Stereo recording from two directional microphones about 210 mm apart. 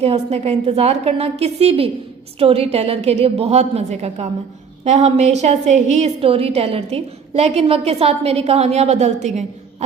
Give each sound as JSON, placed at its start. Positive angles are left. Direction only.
{"t": 0.0, "sound": "a woman's voice", "side_deg": -30}